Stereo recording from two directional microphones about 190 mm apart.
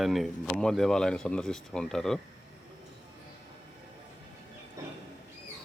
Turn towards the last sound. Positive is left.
turn(degrees=-15)  # may be behind; listen again after turning